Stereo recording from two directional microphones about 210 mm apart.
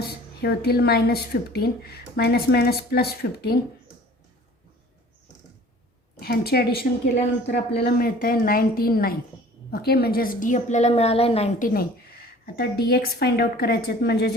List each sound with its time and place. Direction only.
0.3 s a woman's voice: 50° left (ahead or behind)
6.1 s a woman's voice: 50° left (ahead or behind); by 11.7 s 30° left (ahead or behind)
11.7 s a woman's voice: 45° left (ahead or behind)